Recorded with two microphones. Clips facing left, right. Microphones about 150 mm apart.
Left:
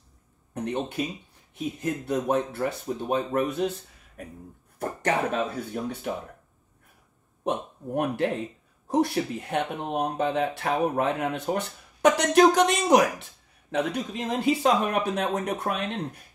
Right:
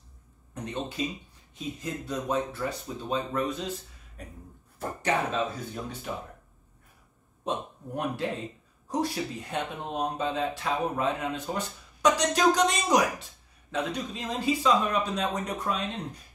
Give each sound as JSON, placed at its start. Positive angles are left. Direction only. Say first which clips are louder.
{"t": 0.6, "sound": "speech", "louder": "left 4 dB", "side_deg": 60}
{"t": 4.7, "sound": "speech", "louder": "left 2 dB", "side_deg": 55}
{"t": 7.4, "sound": "speech", "louder": "left 4 dB", "side_deg": 60}